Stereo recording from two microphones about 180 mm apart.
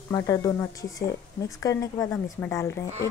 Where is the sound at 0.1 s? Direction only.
15° left (ahead or behind).